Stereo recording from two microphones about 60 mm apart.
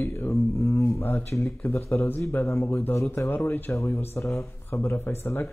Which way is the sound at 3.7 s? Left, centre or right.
Left.